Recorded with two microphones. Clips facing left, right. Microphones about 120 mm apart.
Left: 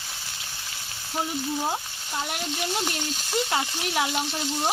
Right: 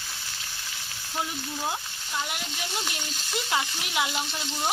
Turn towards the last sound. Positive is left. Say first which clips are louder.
# left 3 dB
turn(degrees=35)  # may be behind; listen again after turning